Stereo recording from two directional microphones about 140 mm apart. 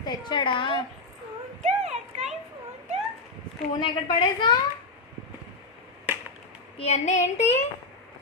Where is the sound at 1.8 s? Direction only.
50° right (ahead or behind).